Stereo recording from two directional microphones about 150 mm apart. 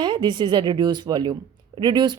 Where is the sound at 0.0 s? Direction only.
30° right (ahead or behind).